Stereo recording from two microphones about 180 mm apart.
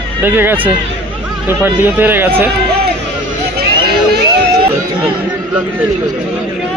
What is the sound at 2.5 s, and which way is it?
Run, 65° right (ahead or behind).